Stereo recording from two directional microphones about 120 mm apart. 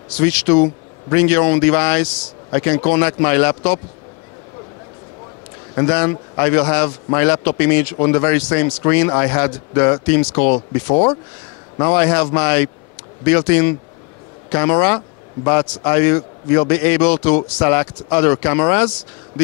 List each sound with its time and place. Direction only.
0.2 s speech: 25° left (ahead or behind)
5.8 s speech: 25° left (ahead or behind)